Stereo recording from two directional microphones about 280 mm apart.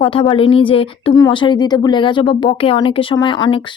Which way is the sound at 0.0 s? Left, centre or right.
Centre.